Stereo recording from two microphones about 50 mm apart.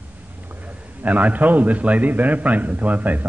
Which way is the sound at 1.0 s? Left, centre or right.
Right.